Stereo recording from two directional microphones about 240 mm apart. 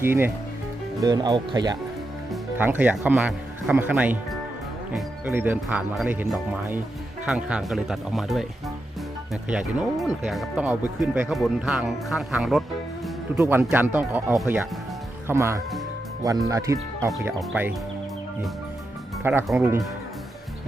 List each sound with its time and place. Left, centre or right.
0.0 s speech: centre
19.2 s speech: centre